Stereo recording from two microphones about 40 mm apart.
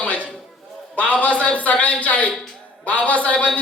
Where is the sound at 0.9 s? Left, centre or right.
Left.